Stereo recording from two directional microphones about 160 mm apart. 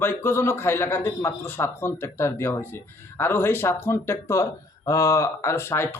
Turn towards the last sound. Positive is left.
turn(degrees=15)  # may be behind; listen again after turning